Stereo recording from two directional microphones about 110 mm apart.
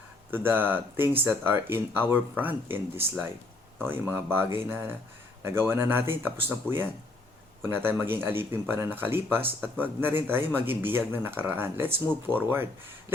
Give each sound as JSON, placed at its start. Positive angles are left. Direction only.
{"t": 0.3, "sound": "speech", "side_deg": -20}